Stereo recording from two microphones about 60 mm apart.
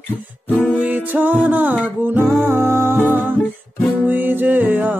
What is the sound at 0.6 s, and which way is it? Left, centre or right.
Music, right.